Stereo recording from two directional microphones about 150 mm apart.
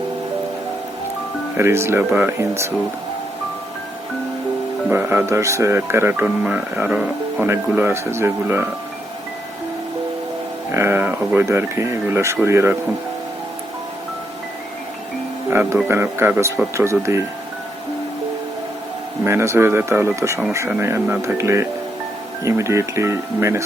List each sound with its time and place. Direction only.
1.5 s speech: 15° right (ahead or behind)
4.9 s speech: 15° right (ahead or behind)
10.7 s speech: 15° right (ahead or behind)
15.4 s speech: 15° right (ahead or behind)
19.2 s speech: 15° right (ahead or behind)